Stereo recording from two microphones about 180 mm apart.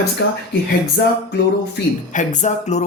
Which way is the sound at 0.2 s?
80° left.